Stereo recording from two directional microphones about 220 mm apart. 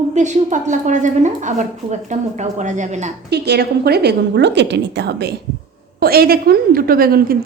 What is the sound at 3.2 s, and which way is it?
A woman's voice, 50° right (ahead or behind).